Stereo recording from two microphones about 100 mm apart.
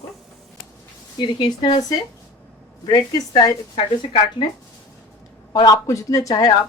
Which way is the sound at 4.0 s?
55° left (ahead or behind).